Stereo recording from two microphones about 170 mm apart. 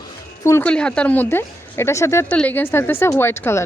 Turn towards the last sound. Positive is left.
turn(degrees=15)  # may be behind; listen again after turning